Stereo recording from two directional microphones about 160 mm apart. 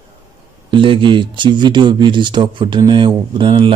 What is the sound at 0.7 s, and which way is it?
Speech, 30° right (ahead or behind).